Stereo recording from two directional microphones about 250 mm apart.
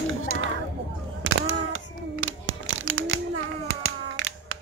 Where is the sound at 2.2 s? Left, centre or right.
Right.